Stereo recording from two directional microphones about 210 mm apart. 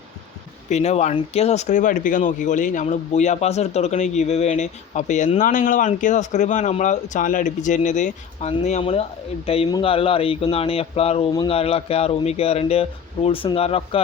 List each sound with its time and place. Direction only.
0.7 s speech: 30° left (ahead or behind)